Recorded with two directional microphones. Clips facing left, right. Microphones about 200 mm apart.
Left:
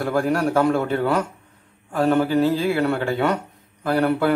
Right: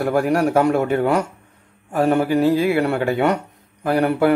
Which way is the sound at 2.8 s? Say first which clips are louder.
Right 2 dB; 15° right (ahead or behind).